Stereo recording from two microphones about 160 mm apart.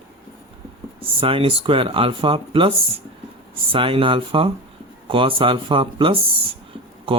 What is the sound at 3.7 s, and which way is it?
Speech, 35° right (ahead or behind).